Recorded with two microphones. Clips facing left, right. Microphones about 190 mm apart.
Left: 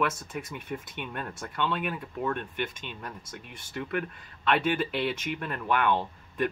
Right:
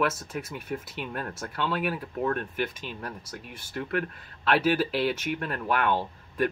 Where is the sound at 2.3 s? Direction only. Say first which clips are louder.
Right 2 dB; 45° right (ahead or behind).